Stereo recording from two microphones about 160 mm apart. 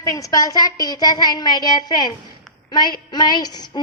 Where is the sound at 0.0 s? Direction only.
20° left (ahead or behind).